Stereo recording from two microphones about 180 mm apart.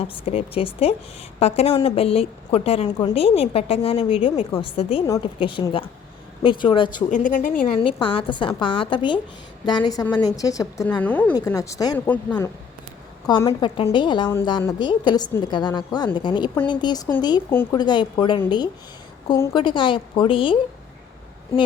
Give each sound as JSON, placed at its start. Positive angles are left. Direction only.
{"t": 0.0, "sound": "a woman's voice", "side_deg": 35}
{"t": 7.1, "sound": "a woman's voice", "side_deg": 45}
{"t": 7.8, "sound": "a woman's voice", "side_deg": 30}
{"t": 11.0, "sound": "a woman's voice", "side_deg": 10}
{"t": 13.2, "sound": "a woman's voice", "side_deg": 20}
{"t": 17.5, "sound": "a woman's voice", "side_deg": 10}
{"t": 17.7, "sound": "a woman's voice", "side_deg": 25}